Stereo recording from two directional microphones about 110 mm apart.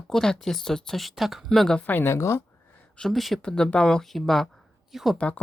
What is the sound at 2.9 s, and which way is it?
Speech, 5° left (ahead or behind).